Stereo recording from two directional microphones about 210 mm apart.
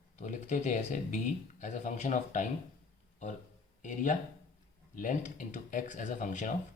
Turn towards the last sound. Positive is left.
turn(degrees=35)  # may be behind; listen again after turning